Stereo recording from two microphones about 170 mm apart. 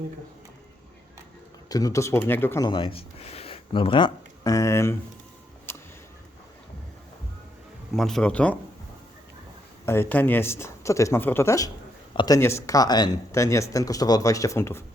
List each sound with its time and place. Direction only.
1.7 s speech: 20° left (ahead or behind)
2.6 s speech: 30° left (ahead or behind)
5.7 s a sound: 15° left (ahead or behind)
7.9 s speech: centre (ahead or behind)
9.8 s speech: 15° left (ahead or behind)